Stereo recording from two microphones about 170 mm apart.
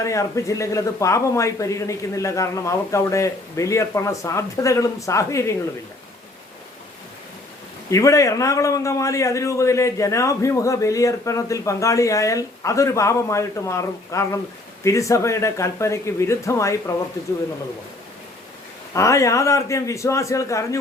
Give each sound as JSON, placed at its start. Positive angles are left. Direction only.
{"t": 0.0, "sound": "a man's voice", "side_deg": 20}
{"t": 7.9, "sound": "a man's voice", "side_deg": 20}
{"t": 18.9, "sound": "a man's voice", "side_deg": 20}